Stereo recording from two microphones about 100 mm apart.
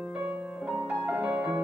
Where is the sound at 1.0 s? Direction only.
15° right (ahead or behind).